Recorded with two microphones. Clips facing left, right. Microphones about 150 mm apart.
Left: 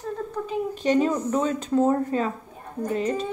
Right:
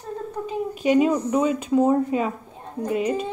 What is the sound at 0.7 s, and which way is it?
Speech, 10° right (ahead or behind).